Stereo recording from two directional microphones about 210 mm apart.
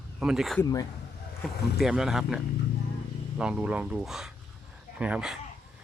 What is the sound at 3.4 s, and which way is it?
Speech, 5° right (ahead or behind).